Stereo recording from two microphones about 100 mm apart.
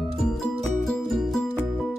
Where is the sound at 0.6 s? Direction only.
5° left (ahead or behind).